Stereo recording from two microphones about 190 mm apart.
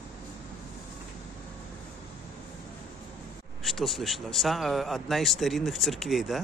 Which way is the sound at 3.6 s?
Centre (ahead or behind).